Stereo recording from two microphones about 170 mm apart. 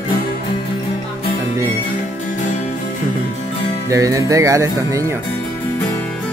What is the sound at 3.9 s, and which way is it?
Speech, 20° right (ahead or behind).